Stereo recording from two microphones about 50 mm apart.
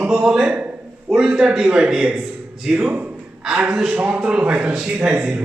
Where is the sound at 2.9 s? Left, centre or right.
Right.